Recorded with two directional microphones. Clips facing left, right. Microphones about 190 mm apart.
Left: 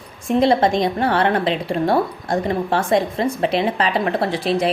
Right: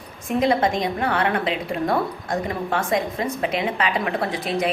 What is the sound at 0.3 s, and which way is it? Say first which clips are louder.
A woman's voice: left 4 dB; 30° left (ahead or behind).